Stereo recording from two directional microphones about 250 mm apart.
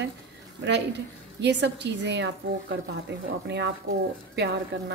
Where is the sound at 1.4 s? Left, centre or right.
Right.